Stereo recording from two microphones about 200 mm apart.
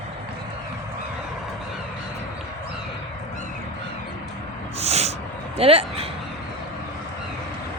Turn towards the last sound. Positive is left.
turn(degrees=-30)  # may be behind; listen again after turning